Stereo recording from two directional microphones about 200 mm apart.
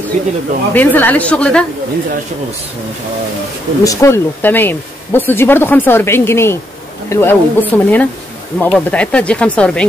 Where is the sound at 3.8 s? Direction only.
15° left (ahead or behind).